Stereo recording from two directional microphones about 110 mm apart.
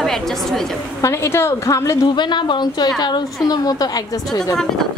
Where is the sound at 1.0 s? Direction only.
25° left (ahead or behind).